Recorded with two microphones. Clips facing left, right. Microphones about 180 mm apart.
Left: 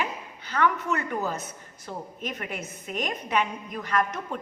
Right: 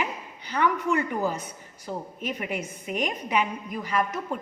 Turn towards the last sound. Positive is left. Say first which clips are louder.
# even
turn(degrees=-10)  # may be behind; listen again after turning